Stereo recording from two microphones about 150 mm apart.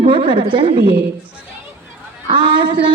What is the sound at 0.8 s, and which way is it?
Speech, 90° right.